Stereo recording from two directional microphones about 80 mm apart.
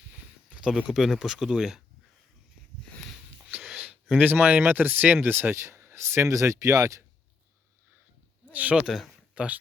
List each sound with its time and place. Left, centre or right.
0.6 s speech: centre
3.6 s a sound: centre
4.2 s speech: right
8.4 s speech: centre
8.8 s speech: centre
9.3 s speech: centre